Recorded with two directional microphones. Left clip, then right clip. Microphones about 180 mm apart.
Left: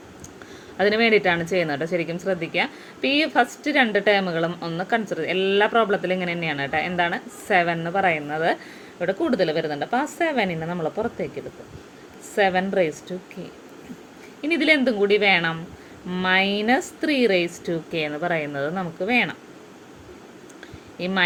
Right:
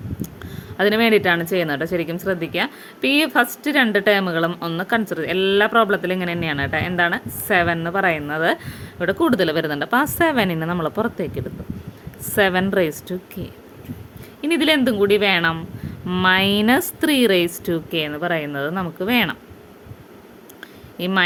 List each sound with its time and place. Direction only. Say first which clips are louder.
0.8 s a woman's voice: right 2 dB; 30° right (ahead or behind)
14.4 s a woman's voice: right 2 dB; 30° right (ahead or behind)
21.0 s a woman's voice: right 3 dB; 30° right (ahead or behind)